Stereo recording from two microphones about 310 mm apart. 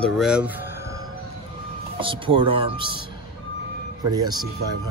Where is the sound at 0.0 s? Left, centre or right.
Centre.